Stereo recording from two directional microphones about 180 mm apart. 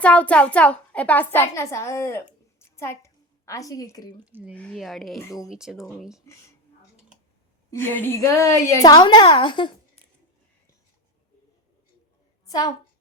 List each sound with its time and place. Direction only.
0.0 s a woman's voice: 5° left (ahead or behind)
2.6 s a sound: 15° left (ahead or behind)
4.3 s speech: 10° right (ahead or behind)
4.5 s speech: 5° left (ahead or behind)
7.7 s a woman's voice: 10° left (ahead or behind)